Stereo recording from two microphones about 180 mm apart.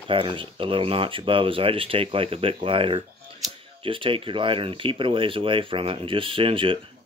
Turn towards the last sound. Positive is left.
turn(degrees=-30)  # may be behind; listen again after turning